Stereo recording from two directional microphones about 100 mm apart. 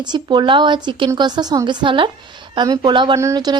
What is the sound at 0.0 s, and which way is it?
A woman's voice, 45° right (ahead or behind).